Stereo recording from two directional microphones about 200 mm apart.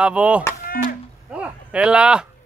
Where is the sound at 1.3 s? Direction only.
5° right (ahead or behind).